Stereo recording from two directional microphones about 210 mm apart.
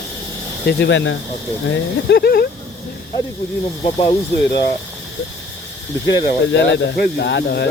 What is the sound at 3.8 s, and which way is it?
Speech, 25° left (ahead or behind).